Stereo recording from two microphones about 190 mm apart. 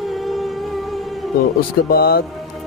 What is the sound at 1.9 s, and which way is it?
Speech, 50° left (ahead or behind).